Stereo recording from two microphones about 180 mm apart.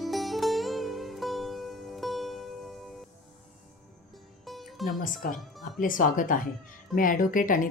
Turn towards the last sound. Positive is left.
turn(degrees=50)  # may be behind; listen again after turning